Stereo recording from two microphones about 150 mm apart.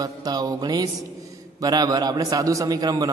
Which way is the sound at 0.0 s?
25° right (ahead or behind).